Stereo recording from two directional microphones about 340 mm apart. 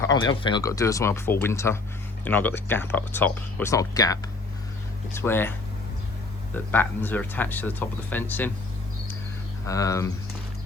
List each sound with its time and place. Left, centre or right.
0.0 s speech: centre
6.7 s speech: centre
9.6 s speech: centre